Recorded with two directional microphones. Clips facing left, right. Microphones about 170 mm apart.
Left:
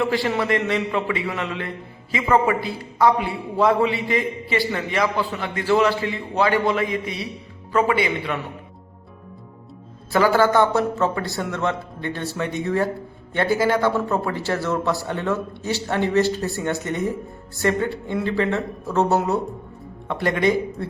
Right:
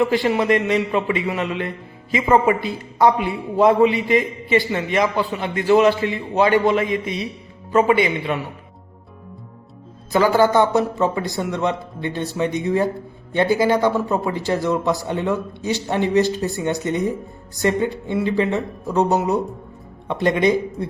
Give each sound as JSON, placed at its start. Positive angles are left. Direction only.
{"t": 0.0, "sound": "a man's voice", "side_deg": -20}
{"t": 10.1, "sound": "a man's voice", "side_deg": -20}